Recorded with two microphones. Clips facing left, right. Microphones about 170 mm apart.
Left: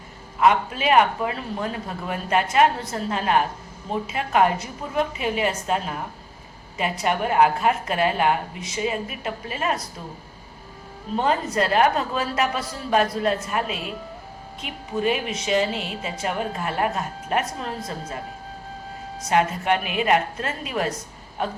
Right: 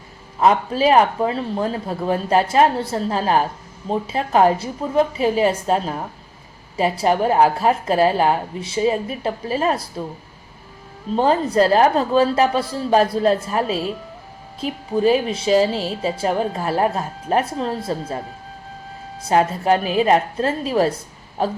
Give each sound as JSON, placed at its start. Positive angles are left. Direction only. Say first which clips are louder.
{"t": 0.3, "sound": "a woman's voice", "louder": "right 3 dB", "side_deg": -35}
{"t": 11.1, "sound": "a woman's voice", "louder": "right 5 dB", "side_deg": -35}
{"t": 19.3, "sound": "a woman's voice", "louder": "right 4 dB", "side_deg": -35}